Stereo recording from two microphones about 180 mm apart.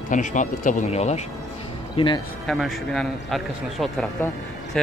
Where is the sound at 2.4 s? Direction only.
Centre (ahead or behind).